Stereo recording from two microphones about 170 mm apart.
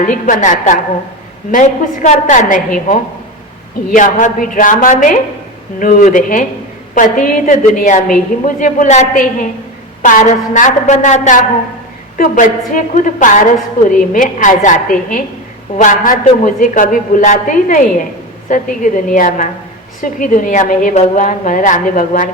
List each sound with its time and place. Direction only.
0.0 s a woman's voice: 50° left (ahead or behind)